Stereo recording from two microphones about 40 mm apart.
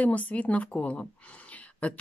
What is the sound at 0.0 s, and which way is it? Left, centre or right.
A woman's voice, left.